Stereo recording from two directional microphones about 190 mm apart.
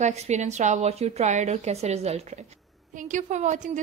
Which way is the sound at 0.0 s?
40° right (ahead or behind).